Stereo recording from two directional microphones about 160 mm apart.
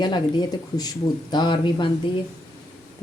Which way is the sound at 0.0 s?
25° left (ahead or behind).